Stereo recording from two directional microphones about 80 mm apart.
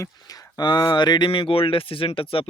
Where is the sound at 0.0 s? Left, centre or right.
Left.